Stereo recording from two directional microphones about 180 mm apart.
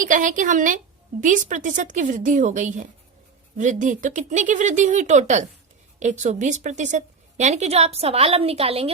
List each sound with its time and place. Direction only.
0.0 s a woman's voice: 45° right (ahead or behind)